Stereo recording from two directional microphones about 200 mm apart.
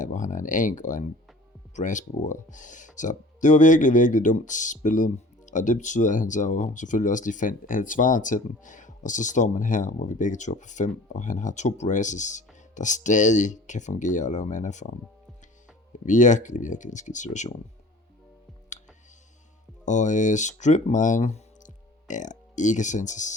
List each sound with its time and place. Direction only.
0.0 s speech: 40° left (ahead or behind)
16.0 s speech: 35° left (ahead or behind)
18.7 s music: 35° left (ahead or behind)
19.8 s speech: 35° left (ahead or behind)